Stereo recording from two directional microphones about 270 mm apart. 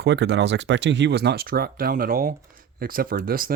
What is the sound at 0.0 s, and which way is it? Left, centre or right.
Speech, right.